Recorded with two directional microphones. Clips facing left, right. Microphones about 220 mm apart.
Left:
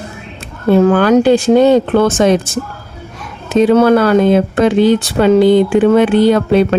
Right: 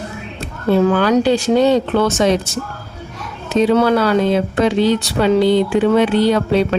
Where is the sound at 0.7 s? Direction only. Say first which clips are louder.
Left 5 dB; 50° left (ahead or behind).